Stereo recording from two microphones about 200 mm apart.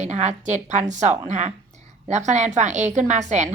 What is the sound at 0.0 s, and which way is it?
Speech, 35° right (ahead or behind).